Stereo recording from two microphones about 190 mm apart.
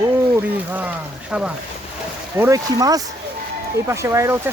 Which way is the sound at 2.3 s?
15° right (ahead or behind).